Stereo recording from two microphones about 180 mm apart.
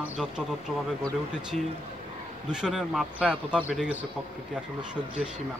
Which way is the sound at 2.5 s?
5° right (ahead or behind).